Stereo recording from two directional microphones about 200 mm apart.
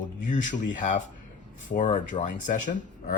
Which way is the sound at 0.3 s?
40° left (ahead or behind).